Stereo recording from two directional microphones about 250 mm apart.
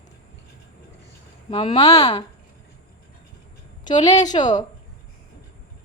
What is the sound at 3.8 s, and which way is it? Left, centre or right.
Speech, centre.